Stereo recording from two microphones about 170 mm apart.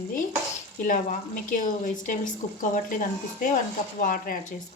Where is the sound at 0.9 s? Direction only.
50° left (ahead or behind).